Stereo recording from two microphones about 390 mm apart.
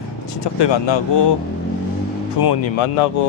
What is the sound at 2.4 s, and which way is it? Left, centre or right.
Speech, left.